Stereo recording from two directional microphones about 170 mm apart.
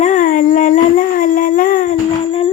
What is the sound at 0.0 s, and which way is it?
Dog, 50° left (ahead or behind).